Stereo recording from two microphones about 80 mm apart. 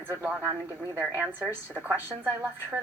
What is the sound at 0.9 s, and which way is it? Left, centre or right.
A woman's voice, right.